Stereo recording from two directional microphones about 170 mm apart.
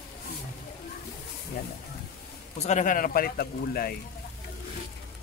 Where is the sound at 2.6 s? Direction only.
45° left (ahead or behind); by 3.9 s 65° left (ahead or behind).